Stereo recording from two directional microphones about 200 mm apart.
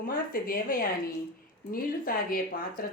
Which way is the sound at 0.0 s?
45° left (ahead or behind).